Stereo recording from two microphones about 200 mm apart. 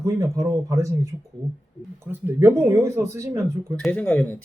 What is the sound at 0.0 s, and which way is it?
Speech, 15° right (ahead or behind).